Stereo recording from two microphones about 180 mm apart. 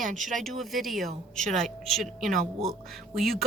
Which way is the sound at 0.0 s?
45° right (ahead or behind).